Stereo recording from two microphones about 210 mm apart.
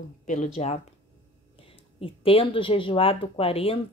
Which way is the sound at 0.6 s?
30° left (ahead or behind).